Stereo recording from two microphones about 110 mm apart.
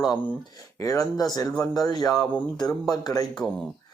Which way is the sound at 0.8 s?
30° left (ahead or behind).